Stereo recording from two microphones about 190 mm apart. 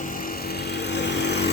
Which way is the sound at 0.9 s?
65° left (ahead or behind).